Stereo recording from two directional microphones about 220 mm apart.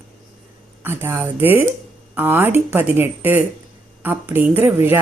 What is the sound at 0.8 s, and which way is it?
Speech, 10° right (ahead or behind).